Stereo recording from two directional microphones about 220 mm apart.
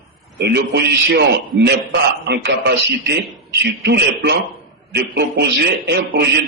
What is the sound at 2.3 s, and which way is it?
A man's voice, 50° right (ahead or behind).